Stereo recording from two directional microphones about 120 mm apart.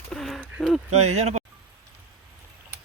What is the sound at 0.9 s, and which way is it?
Speech, 70° right (ahead or behind).